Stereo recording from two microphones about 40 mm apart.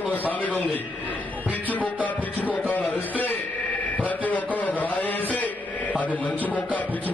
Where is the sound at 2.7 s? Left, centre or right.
Left.